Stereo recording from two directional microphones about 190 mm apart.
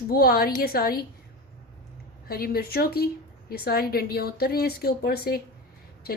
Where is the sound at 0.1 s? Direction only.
50° left (ahead or behind).